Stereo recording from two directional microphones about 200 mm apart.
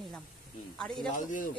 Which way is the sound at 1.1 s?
40° left (ahead or behind).